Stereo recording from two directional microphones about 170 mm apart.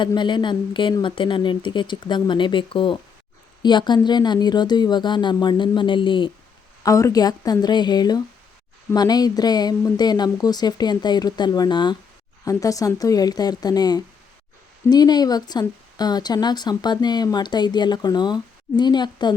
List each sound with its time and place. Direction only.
0.0 s speech: 25° left (ahead or behind)
6.8 s speech: 20° left (ahead or behind)